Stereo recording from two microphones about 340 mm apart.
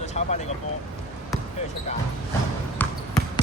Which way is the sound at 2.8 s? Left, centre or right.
Centre.